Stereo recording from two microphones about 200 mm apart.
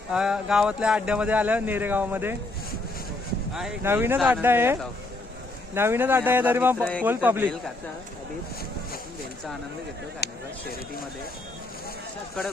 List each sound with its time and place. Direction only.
0.1 s speech: 5° right (ahead or behind)
3.5 s speech: 5° right (ahead or behind)
6.7 s speech: 5° left (ahead or behind)
7.0 s speech: 10° right (ahead or behind)
10.2 s speech: 55° left (ahead or behind)